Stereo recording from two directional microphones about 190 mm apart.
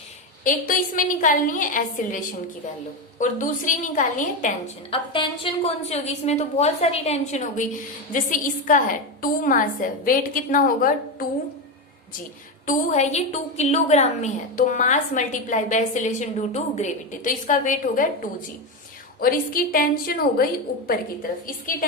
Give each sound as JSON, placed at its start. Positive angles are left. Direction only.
{"t": 0.4, "sound": "a woman's voice", "side_deg": 45}
{"t": 4.9, "sound": "a woman's voice", "side_deg": 30}
{"t": 12.6, "sound": "a woman's voice", "side_deg": 40}